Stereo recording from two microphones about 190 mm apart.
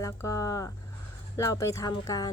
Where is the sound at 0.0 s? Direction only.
15° left (ahead or behind).